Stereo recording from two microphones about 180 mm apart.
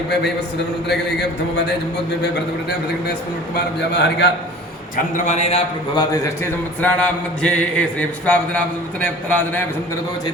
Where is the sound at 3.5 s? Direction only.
70° left (ahead or behind).